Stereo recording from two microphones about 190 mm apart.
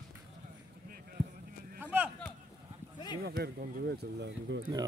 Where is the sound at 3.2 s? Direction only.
55° right (ahead or behind).